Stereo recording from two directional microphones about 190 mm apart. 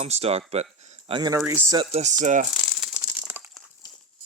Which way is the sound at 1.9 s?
40° right (ahead or behind).